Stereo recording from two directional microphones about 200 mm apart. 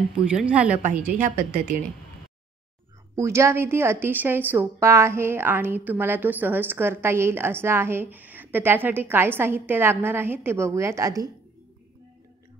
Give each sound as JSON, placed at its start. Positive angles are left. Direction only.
{"t": 0.1, "sound": "a woman's voice", "side_deg": -5}
{"t": 1.2, "sound": "a woman's voice", "side_deg": -40}
{"t": 3.2, "sound": "a woman's voice", "side_deg": -15}